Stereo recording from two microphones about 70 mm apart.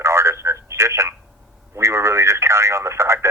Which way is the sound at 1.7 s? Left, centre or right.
Right.